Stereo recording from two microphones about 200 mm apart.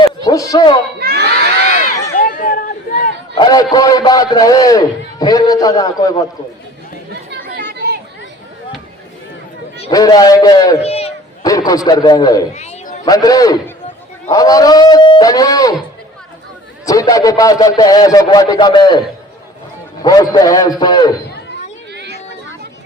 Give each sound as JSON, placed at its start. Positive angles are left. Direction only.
{"t": 0.3, "sound": "speech", "side_deg": 15}
{"t": 0.9, "sound": "crowd", "side_deg": -55}
{"t": 2.1, "sound": "a sound", "side_deg": 40}
{"t": 3.3, "sound": "a man's voice", "side_deg": 20}
{"t": 9.9, "sound": "a man's voice", "side_deg": 20}
{"t": 10.8, "sound": "speech", "side_deg": 30}
{"t": 11.4, "sound": "a man's voice", "side_deg": 20}
{"t": 12.5, "sound": "chatter", "side_deg": 40}
{"t": 13.1, "sound": "a man's voice", "side_deg": 20}
{"t": 16.8, "sound": "a man's voice", "side_deg": 15}
{"t": 21.9, "sound": "a sound", "side_deg": -60}